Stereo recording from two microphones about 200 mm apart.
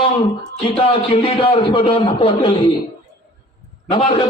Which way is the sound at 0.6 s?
25° left (ahead or behind).